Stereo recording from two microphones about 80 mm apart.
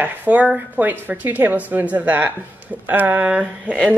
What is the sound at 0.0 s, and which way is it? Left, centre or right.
Speech, right.